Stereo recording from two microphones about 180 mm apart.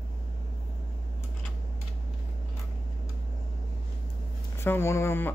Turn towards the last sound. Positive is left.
turn(degrees=15)  # may be behind; listen again after turning